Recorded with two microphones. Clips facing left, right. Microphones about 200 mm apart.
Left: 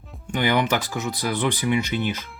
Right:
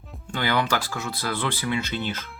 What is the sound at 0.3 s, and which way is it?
Speech, 15° left (ahead or behind).